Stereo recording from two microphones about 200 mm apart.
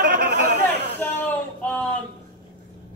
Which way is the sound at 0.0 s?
55° right (ahead or behind).